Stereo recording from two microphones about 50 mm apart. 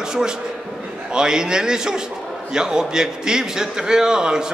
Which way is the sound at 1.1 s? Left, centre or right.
Centre.